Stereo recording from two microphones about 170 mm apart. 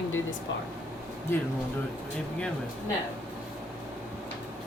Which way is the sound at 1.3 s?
15° left (ahead or behind).